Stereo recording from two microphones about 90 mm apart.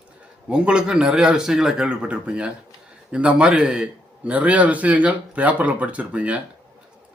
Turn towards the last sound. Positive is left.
turn(degrees=-15)  # may be behind; listen again after turning